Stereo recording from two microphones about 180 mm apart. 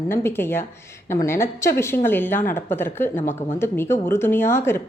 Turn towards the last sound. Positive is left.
turn(degrees=15)  # may be behind; listen again after turning